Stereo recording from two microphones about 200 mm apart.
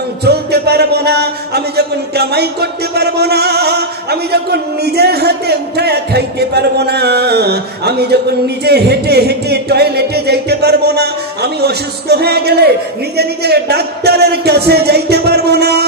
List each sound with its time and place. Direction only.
0.2 s speech: 55° right (ahead or behind)